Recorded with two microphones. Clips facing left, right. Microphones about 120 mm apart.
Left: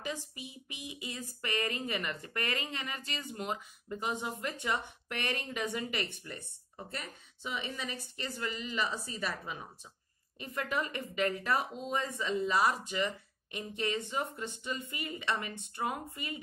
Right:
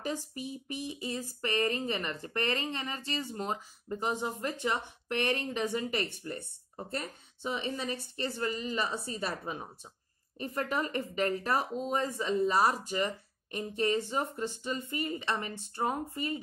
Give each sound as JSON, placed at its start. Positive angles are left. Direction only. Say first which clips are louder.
{"t": 0.0, "sound": "speech", "louder": "right 4 dB", "side_deg": -40}